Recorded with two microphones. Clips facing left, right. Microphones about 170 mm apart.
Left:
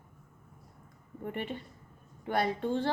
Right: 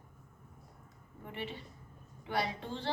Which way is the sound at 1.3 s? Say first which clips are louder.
Left 5 dB; 50° left (ahead or behind).